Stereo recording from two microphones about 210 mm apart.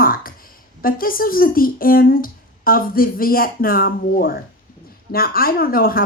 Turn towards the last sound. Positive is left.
turn(degrees=45)  # may be behind; listen again after turning